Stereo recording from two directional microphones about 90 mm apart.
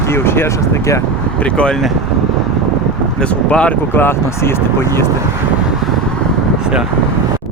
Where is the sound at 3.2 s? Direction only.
10° left (ahead or behind); by 5.1 s 30° left (ahead or behind).